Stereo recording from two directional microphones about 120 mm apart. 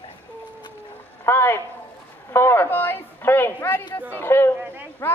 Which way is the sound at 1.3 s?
20° left (ahead or behind).